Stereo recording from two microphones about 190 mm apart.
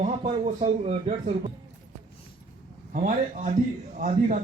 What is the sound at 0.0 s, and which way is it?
A man's voice, 35° right (ahead or behind).